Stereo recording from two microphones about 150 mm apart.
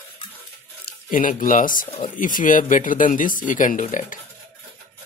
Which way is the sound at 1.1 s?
65° left (ahead or behind).